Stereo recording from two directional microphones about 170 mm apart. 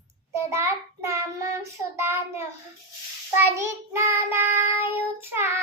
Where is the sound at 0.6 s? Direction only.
15° right (ahead or behind).